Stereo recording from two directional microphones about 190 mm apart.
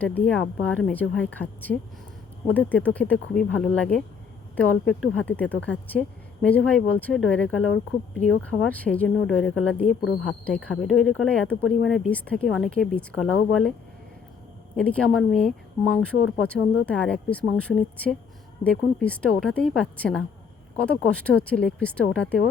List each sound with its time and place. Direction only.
0.0 s a woman's voice: 10° left (ahead or behind)
14.8 s a woman's voice: 5° left (ahead or behind)